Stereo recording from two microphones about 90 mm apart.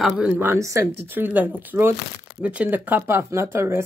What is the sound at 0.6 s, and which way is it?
Speech, 35° right (ahead or behind).